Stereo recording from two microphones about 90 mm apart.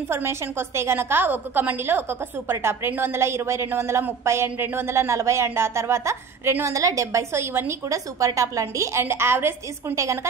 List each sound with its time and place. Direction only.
0.1 s a woman's voice: 25° right (ahead or behind)